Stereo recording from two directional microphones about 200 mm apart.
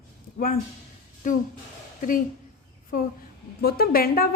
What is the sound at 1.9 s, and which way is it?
Speech, 40° left (ahead or behind).